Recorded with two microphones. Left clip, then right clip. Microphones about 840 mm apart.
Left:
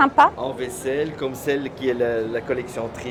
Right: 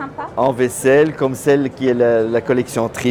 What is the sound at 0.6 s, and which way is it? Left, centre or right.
Speech, right.